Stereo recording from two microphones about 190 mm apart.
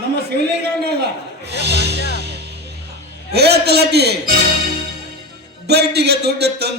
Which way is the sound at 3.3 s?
60° right (ahead or behind).